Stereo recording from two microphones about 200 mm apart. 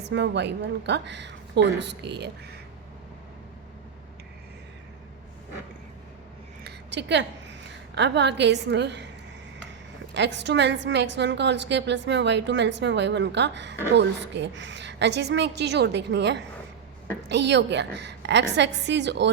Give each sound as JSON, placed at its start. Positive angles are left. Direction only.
{"t": 0.1, "sound": "a woman's voice", "side_deg": -60}
{"t": 6.7, "sound": "a sound", "side_deg": -60}
{"t": 7.9, "sound": "a woman's voice", "side_deg": -60}
{"t": 10.2, "sound": "a woman's voice", "side_deg": -60}